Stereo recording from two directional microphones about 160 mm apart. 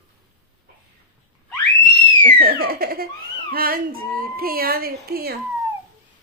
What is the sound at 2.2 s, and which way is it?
A woman's voice, 65° right (ahead or behind).